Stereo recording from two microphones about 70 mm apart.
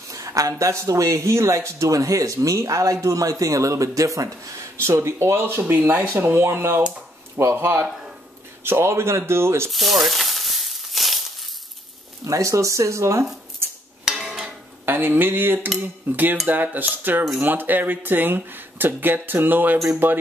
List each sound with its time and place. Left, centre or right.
0.1 s speech: right
9.7 s frying: centre
12.3 s speech: right
14.0 s dishes: centre
14.9 s speech: right